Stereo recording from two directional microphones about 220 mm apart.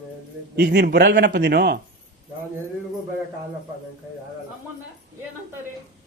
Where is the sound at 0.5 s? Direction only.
50° right (ahead or behind).